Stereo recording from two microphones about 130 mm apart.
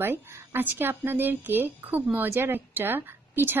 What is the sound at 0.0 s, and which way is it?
Speech, 15° right (ahead or behind).